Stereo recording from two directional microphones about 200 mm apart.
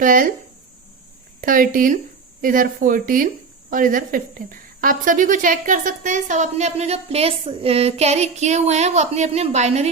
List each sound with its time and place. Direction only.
0.0 s speech: 45° right (ahead or behind)
1.4 s a woman's voice: 45° right (ahead or behind)